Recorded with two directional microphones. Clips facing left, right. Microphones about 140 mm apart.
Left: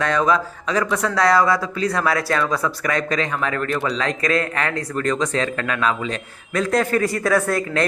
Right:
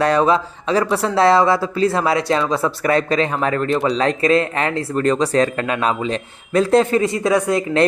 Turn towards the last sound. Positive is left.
turn(degrees=-20)  # may be behind; listen again after turning